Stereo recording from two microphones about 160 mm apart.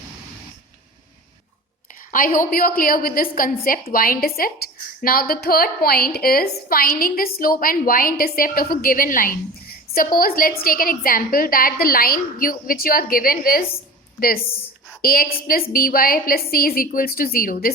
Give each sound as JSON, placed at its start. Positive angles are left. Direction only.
{"t": 2.0, "sound": "a woman's voice", "side_deg": 60}